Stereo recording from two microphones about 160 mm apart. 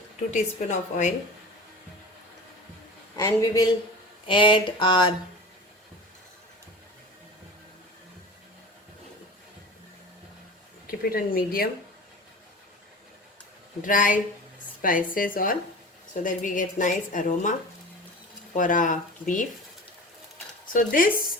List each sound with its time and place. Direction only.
0.3 s a woman's voice: 50° left (ahead or behind)
3.2 s speech: 20° left (ahead or behind)
11.1 s speech: 65° left (ahead or behind)
13.8 s a woman's voice: 55° left (ahead or behind)
20.7 s a woman's voice: 60° left (ahead or behind)